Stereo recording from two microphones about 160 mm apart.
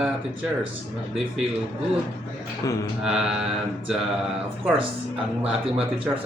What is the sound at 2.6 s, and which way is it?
Speech, 20° left (ahead or behind).